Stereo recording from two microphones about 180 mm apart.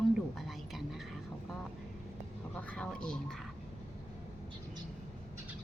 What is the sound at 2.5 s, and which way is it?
Speech, 5° left (ahead or behind).